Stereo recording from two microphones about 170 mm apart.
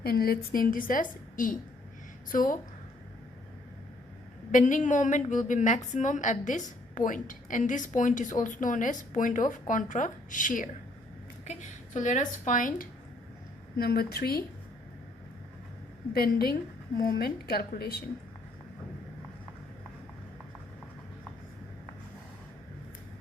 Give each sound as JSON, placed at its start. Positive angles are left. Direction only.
{"t": 0.0, "sound": "a woman's voice", "side_deg": 65}
{"t": 4.5, "sound": "a woman's voice", "side_deg": 45}
{"t": 13.7, "sound": "a woman's voice", "side_deg": 65}
{"t": 16.1, "sound": "a woman's voice", "side_deg": 65}